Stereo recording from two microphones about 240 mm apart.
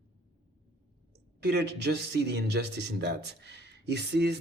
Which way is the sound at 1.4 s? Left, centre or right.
Right.